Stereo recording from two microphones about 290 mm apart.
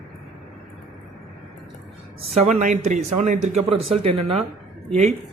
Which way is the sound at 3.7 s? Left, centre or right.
Right.